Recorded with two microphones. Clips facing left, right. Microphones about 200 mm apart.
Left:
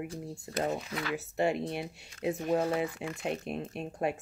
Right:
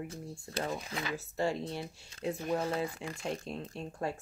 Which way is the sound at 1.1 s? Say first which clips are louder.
Left 4 dB; 20° left (ahead or behind).